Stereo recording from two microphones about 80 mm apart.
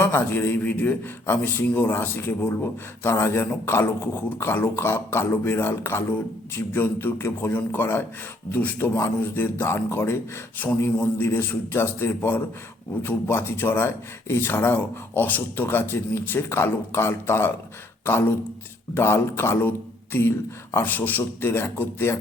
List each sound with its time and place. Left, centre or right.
0.0 s a man's voice: left